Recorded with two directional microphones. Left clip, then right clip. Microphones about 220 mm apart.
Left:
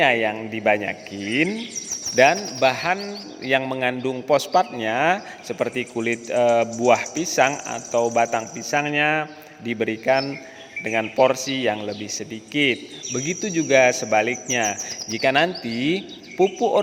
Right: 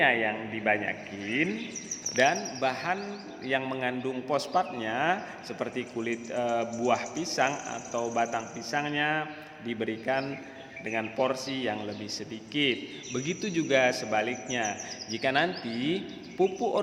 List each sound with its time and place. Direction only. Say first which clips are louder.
0.0 s a man's voice: left 6 dB; 50° left (ahead or behind)